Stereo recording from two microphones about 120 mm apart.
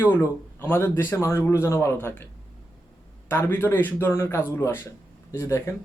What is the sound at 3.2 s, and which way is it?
Speech, 15° left (ahead or behind).